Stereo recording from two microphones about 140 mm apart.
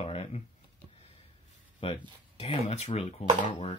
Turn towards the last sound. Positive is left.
turn(degrees=45)  # may be behind; listen again after turning